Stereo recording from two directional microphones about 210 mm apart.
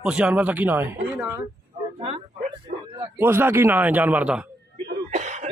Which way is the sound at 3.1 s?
10° right (ahead or behind).